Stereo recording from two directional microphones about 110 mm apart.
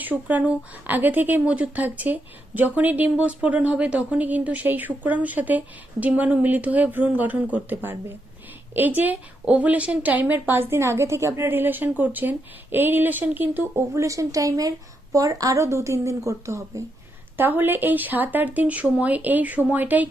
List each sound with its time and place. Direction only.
0.0 s a woman's voice: 15° right (ahead or behind)